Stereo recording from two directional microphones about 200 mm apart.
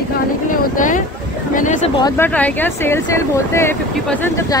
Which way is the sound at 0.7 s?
40° left (ahead or behind).